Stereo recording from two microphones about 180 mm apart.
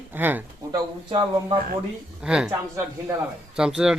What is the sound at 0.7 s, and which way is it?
Speech, 25° right (ahead or behind).